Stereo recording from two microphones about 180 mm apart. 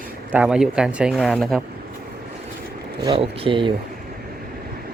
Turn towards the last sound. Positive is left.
turn(degrees=-30)  # may be behind; listen again after turning